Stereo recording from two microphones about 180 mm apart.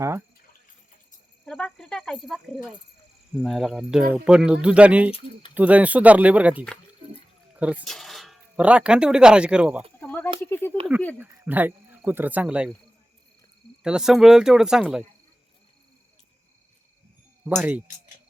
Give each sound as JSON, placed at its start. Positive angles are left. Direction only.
{"t": 0.0, "sound": "speech", "side_deg": -15}
{"t": 1.5, "sound": "speech", "side_deg": 5}
{"t": 10.0, "sound": "snake", "side_deg": 10}
{"t": 10.4, "sound": "a sound", "side_deg": 10}
{"t": 11.2, "sound": "speech", "side_deg": -10}
{"t": 13.8, "sound": "speech", "side_deg": -5}
{"t": 17.5, "sound": "speech", "side_deg": -10}